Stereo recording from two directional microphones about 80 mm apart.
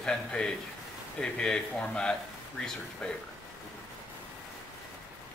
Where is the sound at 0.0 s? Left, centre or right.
Centre.